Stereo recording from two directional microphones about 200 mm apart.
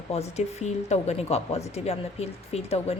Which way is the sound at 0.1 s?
30° left (ahead or behind).